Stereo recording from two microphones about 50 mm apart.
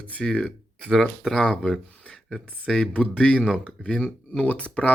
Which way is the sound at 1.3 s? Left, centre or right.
Left.